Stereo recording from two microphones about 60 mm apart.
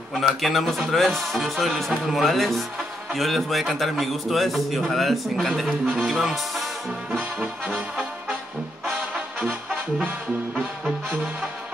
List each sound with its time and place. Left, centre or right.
0.1 s a man's voice: centre
6.0 s a man's voice: centre
8.8 s music: centre